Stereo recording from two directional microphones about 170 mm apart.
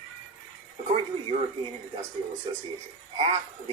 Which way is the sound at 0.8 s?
40° right (ahead or behind).